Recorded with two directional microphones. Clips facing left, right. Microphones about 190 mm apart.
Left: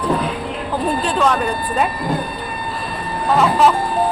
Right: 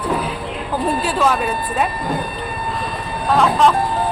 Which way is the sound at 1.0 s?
5° right (ahead or behind).